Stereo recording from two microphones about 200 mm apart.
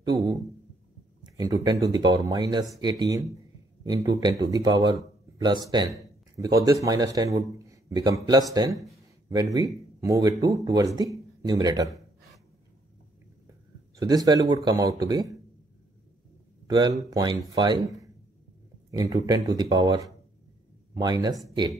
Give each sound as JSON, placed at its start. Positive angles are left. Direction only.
{"t": 0.0, "sound": "a man's voice", "side_deg": -20}
{"t": 8.9, "sound": "a sound", "side_deg": -20}
{"t": 9.9, "sound": "speech", "side_deg": -15}
{"t": 13.9, "sound": "a man's voice", "side_deg": -20}
{"t": 16.6, "sound": "a man's voice", "side_deg": -20}